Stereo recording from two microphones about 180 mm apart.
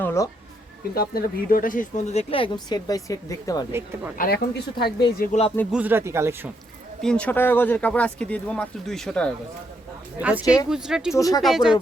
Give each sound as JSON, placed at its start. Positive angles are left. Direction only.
{"t": 0.0, "sound": "a sound", "side_deg": 15}
{"t": 0.9, "sound": "speech", "side_deg": 55}
{"t": 3.7, "sound": "speech", "side_deg": -15}
{"t": 4.2, "sound": "a woman's voice", "side_deg": 60}
{"t": 5.7, "sound": "speech", "side_deg": -10}
{"t": 7.0, "sound": "speech", "side_deg": 5}
{"t": 10.2, "sound": "speech", "side_deg": -10}
{"t": 10.4, "sound": "speech", "side_deg": 20}
{"t": 10.7, "sound": "speech", "side_deg": -5}
{"t": 11.1, "sound": "speech", "side_deg": 20}
{"t": 11.4, "sound": "speech", "side_deg": 0}